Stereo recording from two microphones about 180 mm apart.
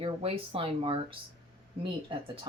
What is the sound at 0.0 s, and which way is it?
Speech, 30° right (ahead or behind).